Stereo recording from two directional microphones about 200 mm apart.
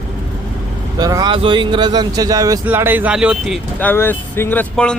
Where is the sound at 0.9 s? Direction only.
20° right (ahead or behind).